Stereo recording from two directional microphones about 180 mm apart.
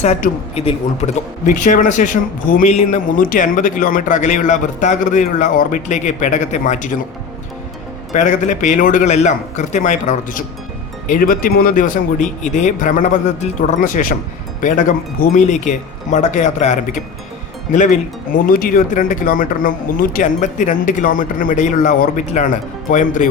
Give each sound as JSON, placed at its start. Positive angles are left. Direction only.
{"t": 0.0, "sound": "speech", "side_deg": 40}
{"t": 8.1, "sound": "speech", "side_deg": 45}
{"t": 18.4, "sound": "speech", "side_deg": 55}